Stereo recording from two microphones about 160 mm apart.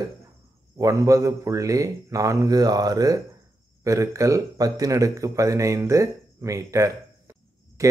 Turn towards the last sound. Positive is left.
turn(degrees=-20)  # may be behind; listen again after turning